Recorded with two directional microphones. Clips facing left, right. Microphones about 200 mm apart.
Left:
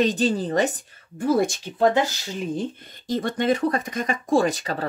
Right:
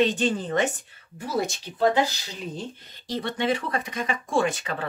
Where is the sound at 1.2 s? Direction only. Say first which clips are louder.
Left 7 dB; 50° left (ahead or behind).